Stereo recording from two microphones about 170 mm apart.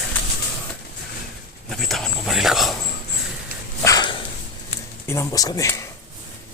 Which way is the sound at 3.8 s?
20° left (ahead or behind).